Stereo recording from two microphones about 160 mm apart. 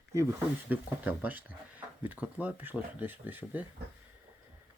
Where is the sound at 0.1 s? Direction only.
15° right (ahead or behind).